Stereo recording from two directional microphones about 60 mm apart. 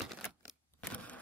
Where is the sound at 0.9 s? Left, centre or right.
Left.